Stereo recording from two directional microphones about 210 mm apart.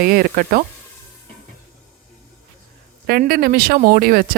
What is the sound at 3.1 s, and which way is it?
Speech, 45° right (ahead or behind).